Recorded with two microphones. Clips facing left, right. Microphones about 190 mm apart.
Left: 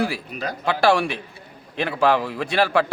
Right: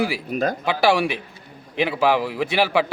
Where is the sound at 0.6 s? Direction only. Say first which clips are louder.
Left 3 dB; 15° right (ahead or behind).